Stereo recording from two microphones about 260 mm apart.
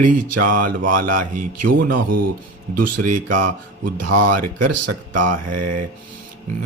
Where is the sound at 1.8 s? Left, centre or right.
Right.